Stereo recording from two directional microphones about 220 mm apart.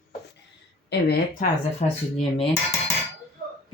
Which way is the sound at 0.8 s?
45° left (ahead or behind).